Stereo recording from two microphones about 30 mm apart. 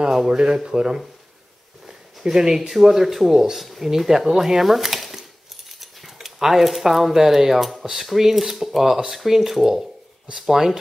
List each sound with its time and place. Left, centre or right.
0.1 s chopping: centre
0.7 s speech: right
2.2 s chopping: centre
5.7 s a sound: centre
6.1 s speech: centre
8.2 s chopping: centre